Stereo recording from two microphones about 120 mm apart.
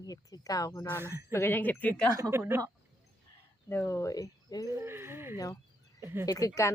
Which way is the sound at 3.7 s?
20° left (ahead or behind).